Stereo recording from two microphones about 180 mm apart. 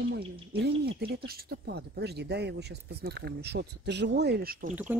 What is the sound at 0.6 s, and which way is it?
Speech, 60° right (ahead or behind).